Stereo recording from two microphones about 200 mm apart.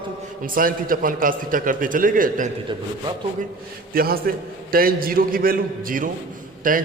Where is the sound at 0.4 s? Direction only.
45° right (ahead or behind).